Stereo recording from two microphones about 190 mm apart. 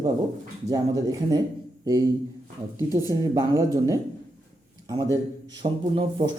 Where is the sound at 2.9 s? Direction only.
20° right (ahead or behind).